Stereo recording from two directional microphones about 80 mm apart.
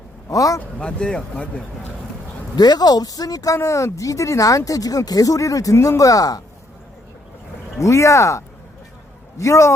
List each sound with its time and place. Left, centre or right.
0.3 s speech: left
0.8 s speech: centre
2.6 s speech: left
7.8 s speech: left